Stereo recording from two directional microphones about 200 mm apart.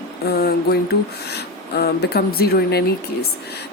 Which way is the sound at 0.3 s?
55° left (ahead or behind).